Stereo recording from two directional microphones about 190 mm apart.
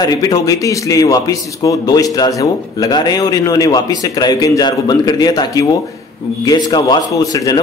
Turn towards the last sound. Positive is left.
turn(degrees=20)  # may be behind; listen again after turning